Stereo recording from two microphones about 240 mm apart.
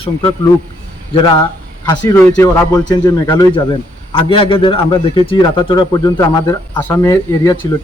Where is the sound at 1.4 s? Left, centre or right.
Centre.